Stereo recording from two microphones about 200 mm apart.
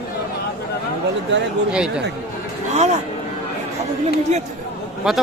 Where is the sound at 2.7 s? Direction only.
35° right (ahead or behind).